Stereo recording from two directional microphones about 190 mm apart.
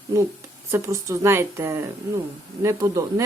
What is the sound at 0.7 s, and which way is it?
Speech, 15° right (ahead or behind).